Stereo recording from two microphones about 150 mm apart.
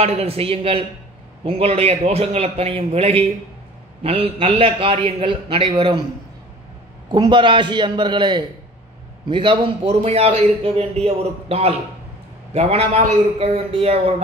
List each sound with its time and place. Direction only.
0.0 s a man's voice: 40° right (ahead or behind)
7.1 s a man's voice: 30° right (ahead or behind)